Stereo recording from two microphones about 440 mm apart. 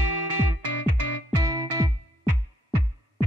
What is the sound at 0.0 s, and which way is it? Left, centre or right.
Music, right.